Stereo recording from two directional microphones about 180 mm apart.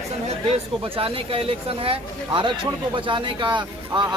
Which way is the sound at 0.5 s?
30° right (ahead or behind).